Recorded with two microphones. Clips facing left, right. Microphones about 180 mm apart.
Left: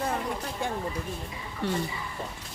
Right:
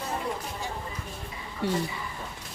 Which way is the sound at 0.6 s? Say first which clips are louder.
Left 8 dB; 55° left (ahead or behind).